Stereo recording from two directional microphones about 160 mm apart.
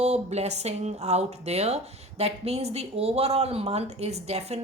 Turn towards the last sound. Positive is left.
turn(degrees=-40)  # may be behind; listen again after turning